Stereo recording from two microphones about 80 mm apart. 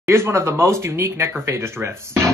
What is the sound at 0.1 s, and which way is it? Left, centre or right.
Speech, right.